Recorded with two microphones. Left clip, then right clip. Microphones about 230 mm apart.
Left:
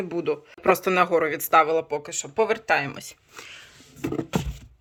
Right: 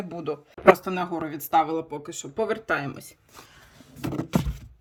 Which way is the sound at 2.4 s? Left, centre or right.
Left.